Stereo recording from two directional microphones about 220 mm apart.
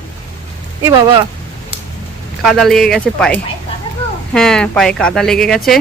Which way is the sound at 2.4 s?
Centre (ahead or behind).